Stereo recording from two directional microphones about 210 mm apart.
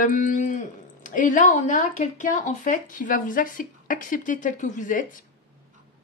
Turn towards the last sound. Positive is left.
turn(degrees=40)  # may be behind; listen again after turning